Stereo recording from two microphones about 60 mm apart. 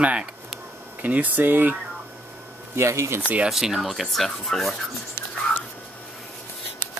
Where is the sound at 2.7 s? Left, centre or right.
Right.